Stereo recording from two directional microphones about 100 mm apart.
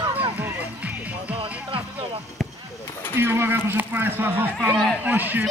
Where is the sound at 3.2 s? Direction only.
25° right (ahead or behind).